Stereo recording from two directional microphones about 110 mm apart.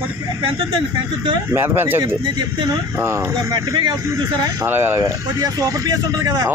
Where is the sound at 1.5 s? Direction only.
20° right (ahead or behind).